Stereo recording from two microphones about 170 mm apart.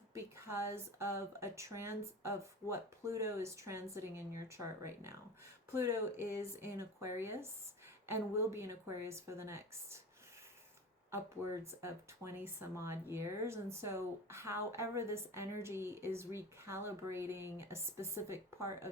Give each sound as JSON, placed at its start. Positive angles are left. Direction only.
{"t": 0.1, "sound": "speech", "side_deg": -15}
{"t": 11.6, "sound": "speech", "side_deg": -15}